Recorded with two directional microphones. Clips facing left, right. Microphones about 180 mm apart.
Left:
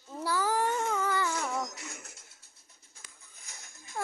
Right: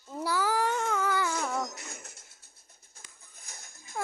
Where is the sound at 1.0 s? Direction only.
10° right (ahead or behind).